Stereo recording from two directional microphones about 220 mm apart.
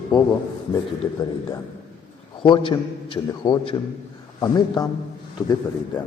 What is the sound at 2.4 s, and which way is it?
A man's voice, 25° left (ahead or behind).